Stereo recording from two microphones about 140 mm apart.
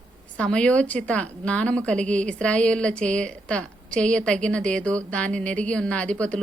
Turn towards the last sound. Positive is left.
turn(degrees=10)  # may be behind; listen again after turning